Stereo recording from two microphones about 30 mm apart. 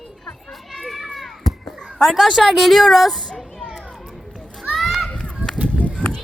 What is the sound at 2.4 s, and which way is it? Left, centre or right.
Speech, centre.